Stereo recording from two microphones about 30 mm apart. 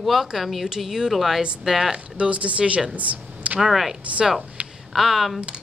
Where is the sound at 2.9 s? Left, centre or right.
Right.